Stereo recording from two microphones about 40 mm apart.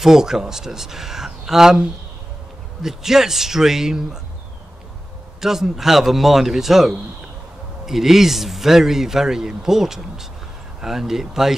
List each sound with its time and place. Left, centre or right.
0.0 s speech: centre
5.4 s speech: centre